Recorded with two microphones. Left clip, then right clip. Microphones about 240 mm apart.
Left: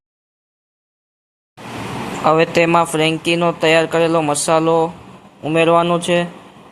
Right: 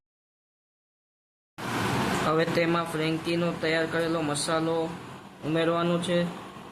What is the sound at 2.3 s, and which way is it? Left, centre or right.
Speech, left.